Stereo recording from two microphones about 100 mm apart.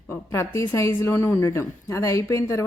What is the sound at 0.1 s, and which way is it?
A woman's voice, 30° left (ahead or behind).